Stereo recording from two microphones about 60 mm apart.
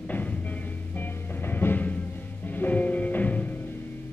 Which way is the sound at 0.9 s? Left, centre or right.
Left.